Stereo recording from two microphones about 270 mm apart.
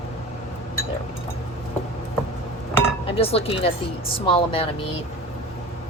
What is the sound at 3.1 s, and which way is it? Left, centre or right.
Speech, left.